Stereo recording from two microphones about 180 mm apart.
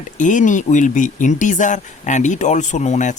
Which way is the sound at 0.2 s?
45° left (ahead or behind).